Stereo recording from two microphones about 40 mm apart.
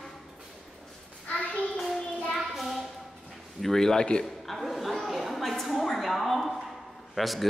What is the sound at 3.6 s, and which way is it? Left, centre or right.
Speech, centre.